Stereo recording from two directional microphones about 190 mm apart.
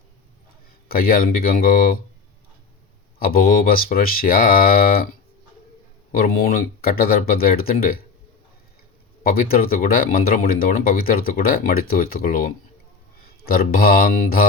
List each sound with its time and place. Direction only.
0.9 s speech: 50° left (ahead or behind)
3.2 s speech: 50° left (ahead or behind)
6.1 s speech: 50° left (ahead or behind)
9.2 s speech: 50° left (ahead or behind)